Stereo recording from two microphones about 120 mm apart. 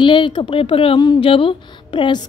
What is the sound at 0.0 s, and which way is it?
A woman's voice, 45° left (ahead or behind).